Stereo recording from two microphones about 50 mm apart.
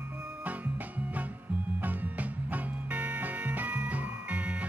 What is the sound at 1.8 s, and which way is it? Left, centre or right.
Music, right.